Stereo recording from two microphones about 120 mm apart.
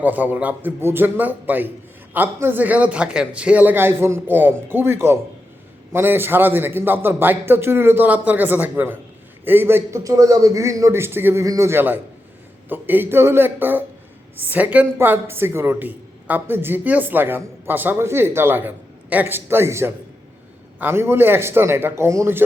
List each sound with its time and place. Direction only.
0.0 s a man's voice: 15° right (ahead or behind)